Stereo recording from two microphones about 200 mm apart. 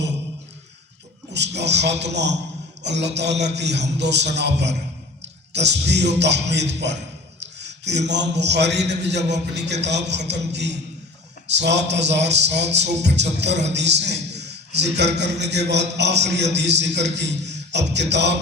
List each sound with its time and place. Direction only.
1.3 s a man's voice: 60° right (ahead or behind)